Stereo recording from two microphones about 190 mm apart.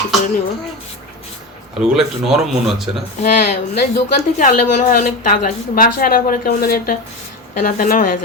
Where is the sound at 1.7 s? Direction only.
Centre (ahead or behind).